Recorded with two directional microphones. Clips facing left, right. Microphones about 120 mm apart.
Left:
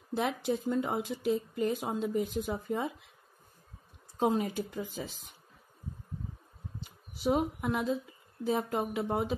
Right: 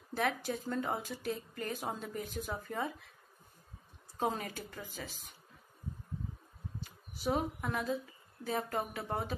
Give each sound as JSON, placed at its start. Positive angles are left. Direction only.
{"t": 0.1, "sound": "speech", "side_deg": 15}
{"t": 4.2, "sound": "speech", "side_deg": 20}
{"t": 6.8, "sound": "a sound", "side_deg": 20}
{"t": 8.6, "sound": "speech", "side_deg": 15}